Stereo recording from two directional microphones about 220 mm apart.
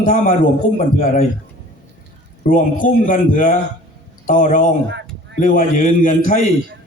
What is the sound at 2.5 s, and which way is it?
A man's voice, 40° left (ahead or behind).